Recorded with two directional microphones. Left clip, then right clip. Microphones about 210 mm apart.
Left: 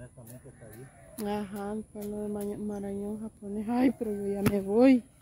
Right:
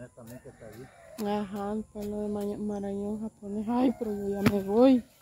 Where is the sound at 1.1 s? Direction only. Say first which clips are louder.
Right 2 dB; 20° left (ahead or behind).